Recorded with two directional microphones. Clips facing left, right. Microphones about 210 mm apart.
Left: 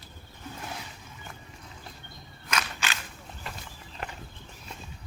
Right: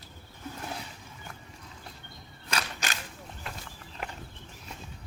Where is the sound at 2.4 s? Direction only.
35° right (ahead or behind).